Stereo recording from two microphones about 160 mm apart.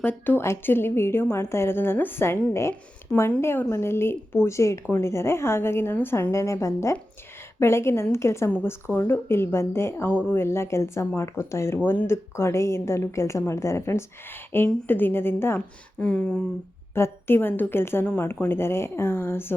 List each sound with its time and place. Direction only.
0.0 s a woman's voice: 15° left (ahead or behind)